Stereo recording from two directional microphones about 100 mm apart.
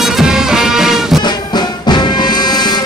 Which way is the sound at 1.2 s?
45° left (ahead or behind).